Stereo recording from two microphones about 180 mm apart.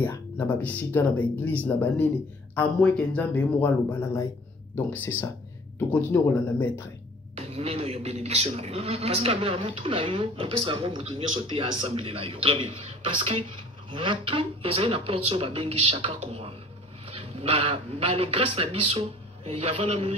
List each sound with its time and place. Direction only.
0.0 s speech: 10° left (ahead or behind)
7.3 s a man's voice: 35° right (ahead or behind)